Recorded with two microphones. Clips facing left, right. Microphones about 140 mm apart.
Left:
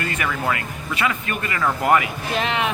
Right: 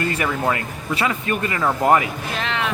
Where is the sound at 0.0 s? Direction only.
30° right (ahead or behind).